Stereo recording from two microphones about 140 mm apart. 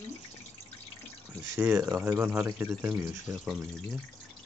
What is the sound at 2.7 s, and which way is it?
Speech, 5° right (ahead or behind).